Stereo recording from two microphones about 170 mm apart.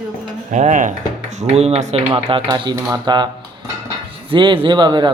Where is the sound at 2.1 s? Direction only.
30° right (ahead or behind).